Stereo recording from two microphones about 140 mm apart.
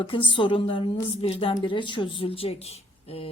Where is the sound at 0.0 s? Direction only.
35° left (ahead or behind).